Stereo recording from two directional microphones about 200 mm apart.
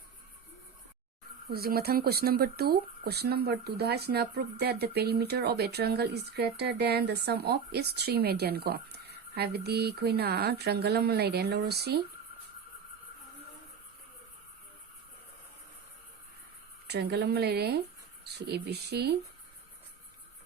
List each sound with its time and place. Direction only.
1.5 s speech: 50° right (ahead or behind)
16.9 s speech: 55° right (ahead or behind)